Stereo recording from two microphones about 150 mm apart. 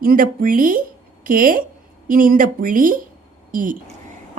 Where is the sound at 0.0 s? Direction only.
70° right (ahead or behind).